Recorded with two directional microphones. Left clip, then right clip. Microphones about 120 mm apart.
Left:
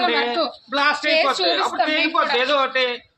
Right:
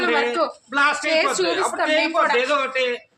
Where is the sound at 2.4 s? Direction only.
15° left (ahead or behind).